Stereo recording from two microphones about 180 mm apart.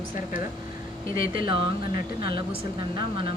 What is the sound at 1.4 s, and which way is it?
Speech, 30° right (ahead or behind).